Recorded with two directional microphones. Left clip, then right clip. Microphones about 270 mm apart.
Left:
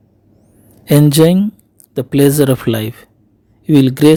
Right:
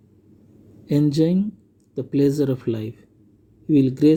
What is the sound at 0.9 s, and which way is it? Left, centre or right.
Speech, left.